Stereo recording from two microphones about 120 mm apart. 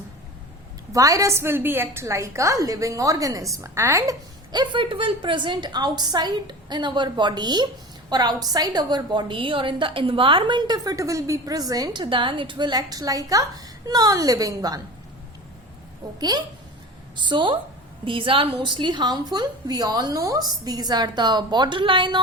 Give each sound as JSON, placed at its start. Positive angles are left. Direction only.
{"t": 0.9, "sound": "a woman's voice", "side_deg": -30}
{"t": 12.0, "sound": "a woman's voice", "side_deg": -45}
{"t": 17.2, "sound": "a woman's voice", "side_deg": -45}